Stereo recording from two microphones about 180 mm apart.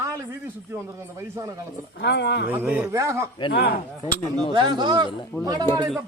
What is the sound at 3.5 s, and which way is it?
Speech, 60° left (ahead or behind).